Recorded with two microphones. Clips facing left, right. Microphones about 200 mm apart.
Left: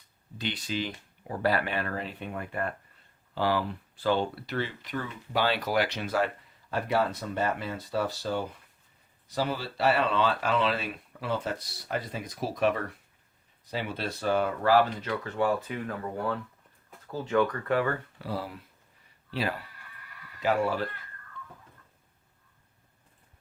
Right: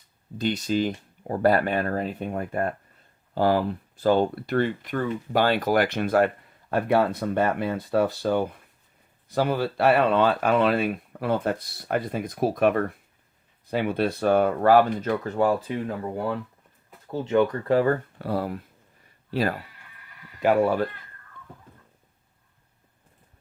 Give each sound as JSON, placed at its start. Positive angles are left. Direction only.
{"t": 0.3, "sound": "speech", "side_deg": -45}
{"t": 18.2, "sound": "speech", "side_deg": -55}